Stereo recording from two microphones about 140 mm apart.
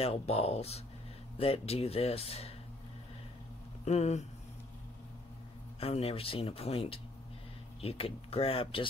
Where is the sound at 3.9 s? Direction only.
55° left (ahead or behind).